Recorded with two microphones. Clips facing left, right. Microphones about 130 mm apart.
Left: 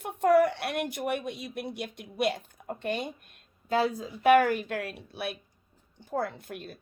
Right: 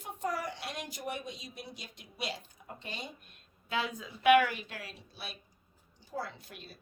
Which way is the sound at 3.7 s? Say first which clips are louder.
Left 8 dB; 35° left (ahead or behind).